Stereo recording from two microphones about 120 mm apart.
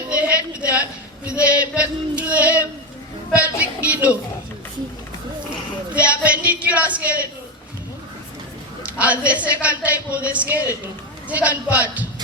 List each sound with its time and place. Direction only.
0.1 s a sound: 10° right (ahead or behind)
1.4 s speech: 10° right (ahead or behind)
5.9 s speech: 10° right (ahead or behind)
8.9 s speech: 10° right (ahead or behind)